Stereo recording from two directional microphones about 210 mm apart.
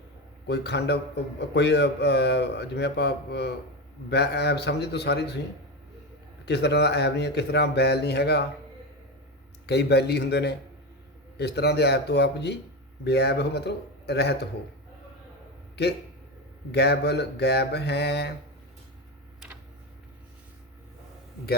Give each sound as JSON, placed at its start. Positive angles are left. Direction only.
{"t": 0.4, "sound": "speech", "side_deg": 50}
{"t": 6.4, "sound": "speech", "side_deg": 50}
{"t": 9.6, "sound": "speech", "side_deg": 50}
{"t": 15.7, "sound": "a man's voice", "side_deg": 50}